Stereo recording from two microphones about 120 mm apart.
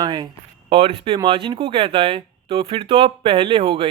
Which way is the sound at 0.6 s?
55° right (ahead or behind).